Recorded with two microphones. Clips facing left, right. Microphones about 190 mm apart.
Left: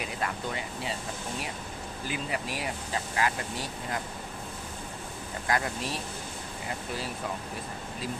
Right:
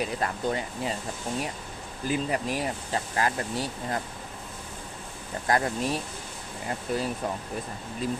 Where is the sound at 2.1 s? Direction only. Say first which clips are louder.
Right 7 dB; 40° right (ahead or behind).